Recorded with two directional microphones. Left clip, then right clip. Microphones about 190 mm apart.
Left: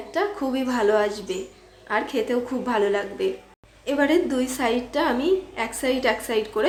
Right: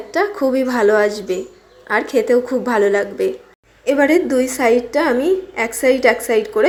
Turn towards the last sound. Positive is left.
turn(degrees=-20)  # may be behind; listen again after turning